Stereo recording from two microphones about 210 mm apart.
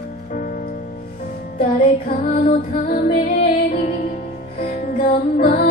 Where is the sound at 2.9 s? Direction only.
40° left (ahead or behind).